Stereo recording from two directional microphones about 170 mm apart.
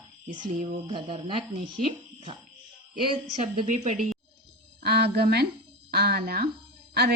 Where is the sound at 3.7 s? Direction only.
45° right (ahead or behind).